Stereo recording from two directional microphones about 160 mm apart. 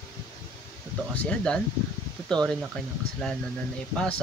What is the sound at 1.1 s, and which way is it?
Speech, 10° left (ahead or behind).